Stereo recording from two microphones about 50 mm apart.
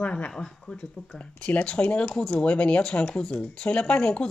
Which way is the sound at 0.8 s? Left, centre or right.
Centre.